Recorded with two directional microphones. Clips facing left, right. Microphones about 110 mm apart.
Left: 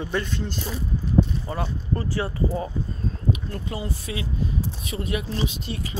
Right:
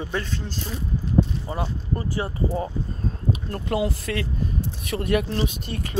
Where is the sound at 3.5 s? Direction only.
65° right (ahead or behind).